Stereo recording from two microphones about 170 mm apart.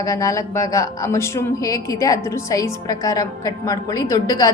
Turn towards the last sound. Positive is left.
turn(degrees=20)  # may be behind; listen again after turning